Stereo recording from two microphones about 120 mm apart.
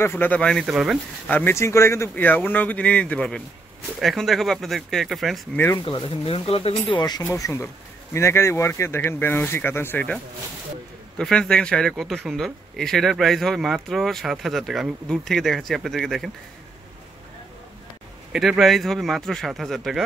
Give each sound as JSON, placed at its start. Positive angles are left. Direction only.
{"t": 0.0, "sound": "speech", "side_deg": 15}
{"t": 0.7, "sound": "speech", "side_deg": -5}
{"t": 1.3, "sound": "speech", "side_deg": 20}
{"t": 5.9, "sound": "speech", "side_deg": 50}
{"t": 7.0, "sound": "speech", "side_deg": 35}
{"t": 7.3, "sound": "speech", "side_deg": 25}
{"t": 11.1, "sound": "speech", "side_deg": 5}
{"t": 18.3, "sound": "speech", "side_deg": -5}